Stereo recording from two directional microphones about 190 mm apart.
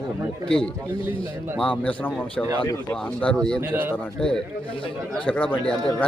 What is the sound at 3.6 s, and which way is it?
Speech, 10° right (ahead or behind).